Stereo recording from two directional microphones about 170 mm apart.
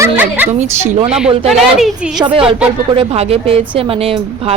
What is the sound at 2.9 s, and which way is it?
Speech, 35° right (ahead or behind).